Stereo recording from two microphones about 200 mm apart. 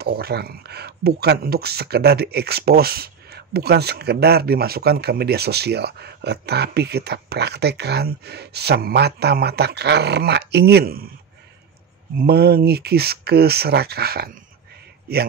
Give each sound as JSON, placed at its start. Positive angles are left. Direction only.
{"t": 0.0, "sound": "speech", "side_deg": -50}
{"t": 12.2, "sound": "speech", "side_deg": -50}